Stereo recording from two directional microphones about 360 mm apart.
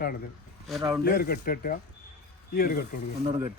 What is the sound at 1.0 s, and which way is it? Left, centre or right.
Speech, left.